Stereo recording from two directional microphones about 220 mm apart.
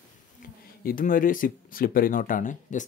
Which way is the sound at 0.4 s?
40° left (ahead or behind).